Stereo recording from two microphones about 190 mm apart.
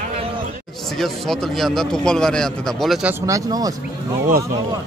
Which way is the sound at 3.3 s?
20° right (ahead or behind).